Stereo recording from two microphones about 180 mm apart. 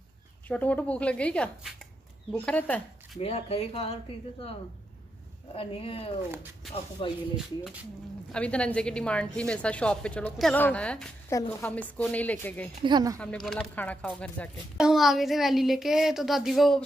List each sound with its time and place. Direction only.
0.5 s a woman's voice: 10° left (ahead or behind)
3.2 s speech: 35° left (ahead or behind)
7.3 s a woman's voice: centre (ahead or behind)
12.8 s speech: 20° right (ahead or behind)
13.2 s a woman's voice: 5° left (ahead or behind)